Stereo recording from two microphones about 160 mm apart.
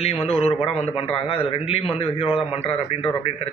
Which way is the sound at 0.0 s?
40° left (ahead or behind).